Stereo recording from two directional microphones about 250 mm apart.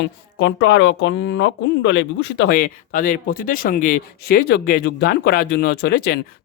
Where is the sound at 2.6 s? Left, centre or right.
Left.